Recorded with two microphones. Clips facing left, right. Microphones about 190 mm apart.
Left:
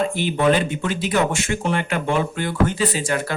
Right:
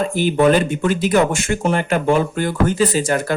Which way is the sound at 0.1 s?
45° right (ahead or behind).